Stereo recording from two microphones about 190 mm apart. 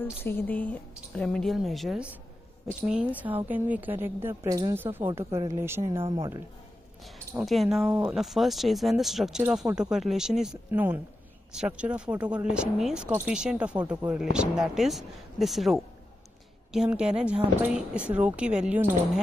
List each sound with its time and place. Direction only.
0.0 s a woman's voice: 10° left (ahead or behind); by 6.4 s 15° right (ahead or behind)
7.1 s a woman's voice: centre (ahead or behind)